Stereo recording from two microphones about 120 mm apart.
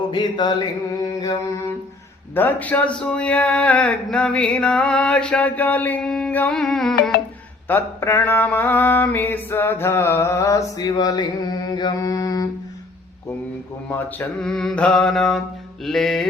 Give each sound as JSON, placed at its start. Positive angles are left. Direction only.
{"t": 0.1, "sound": "mantra", "side_deg": 40}
{"t": 2.3, "sound": "speech", "side_deg": 15}
{"t": 7.7, "sound": "speech", "side_deg": 20}
{"t": 10.8, "sound": "mantra", "side_deg": 35}
{"t": 14.4, "sound": "mantra", "side_deg": 5}